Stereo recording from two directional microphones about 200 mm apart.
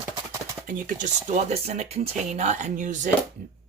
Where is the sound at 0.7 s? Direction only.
40° right (ahead or behind).